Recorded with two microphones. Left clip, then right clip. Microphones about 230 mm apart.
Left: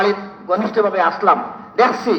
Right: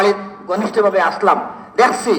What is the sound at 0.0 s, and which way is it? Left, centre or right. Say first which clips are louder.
A man's voice: right 2 dB; right.